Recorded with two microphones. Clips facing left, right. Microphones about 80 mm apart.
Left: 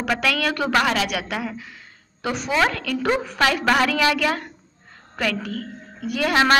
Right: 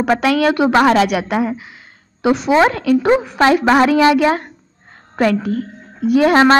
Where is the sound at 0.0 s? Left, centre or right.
Right.